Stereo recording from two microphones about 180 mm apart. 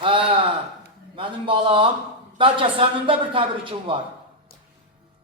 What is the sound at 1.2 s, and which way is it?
A man's voice, 30° right (ahead or behind).